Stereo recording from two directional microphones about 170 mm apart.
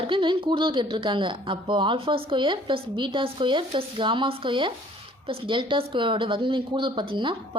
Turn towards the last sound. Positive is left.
turn(degrees=-30)  # may be behind; listen again after turning